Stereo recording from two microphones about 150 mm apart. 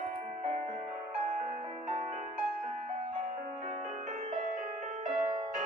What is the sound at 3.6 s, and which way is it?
Music, 50° right (ahead or behind).